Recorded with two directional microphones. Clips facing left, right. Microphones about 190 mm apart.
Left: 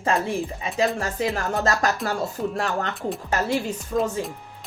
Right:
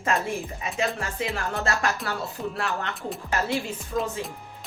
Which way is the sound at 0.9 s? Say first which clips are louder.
Left 5 dB; 40° left (ahead or behind).